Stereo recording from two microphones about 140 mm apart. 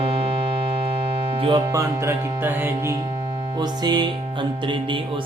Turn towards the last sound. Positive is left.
turn(degrees=-30)  # may be behind; listen again after turning